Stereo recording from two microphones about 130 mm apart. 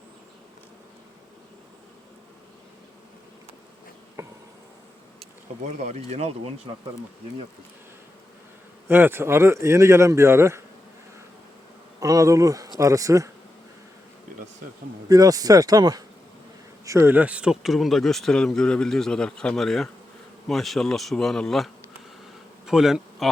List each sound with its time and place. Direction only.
4.2 s insect: 20° right (ahead or behind)
5.6 s speech: 60° right (ahead or behind)
8.9 s speech: 15° right (ahead or behind)
11.9 s speech: 25° right (ahead or behind)
15.1 s speech: 30° right (ahead or behind); by 23.3 s 5° right (ahead or behind)